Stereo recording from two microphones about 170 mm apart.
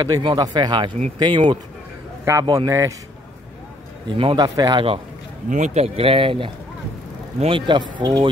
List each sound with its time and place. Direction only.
0.0 s speech: 25° right (ahead or behind)
4.2 s speech: 30° right (ahead or behind)
5.5 s speech: 40° right (ahead or behind); by 8.3 s 25° right (ahead or behind)